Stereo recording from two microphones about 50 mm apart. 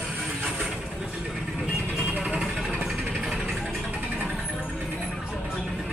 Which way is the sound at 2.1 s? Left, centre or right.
Right.